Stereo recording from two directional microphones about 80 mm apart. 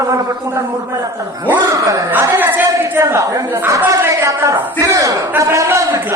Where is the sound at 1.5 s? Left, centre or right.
Right.